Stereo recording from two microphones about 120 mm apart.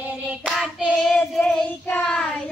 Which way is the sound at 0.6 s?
5° left (ahead or behind).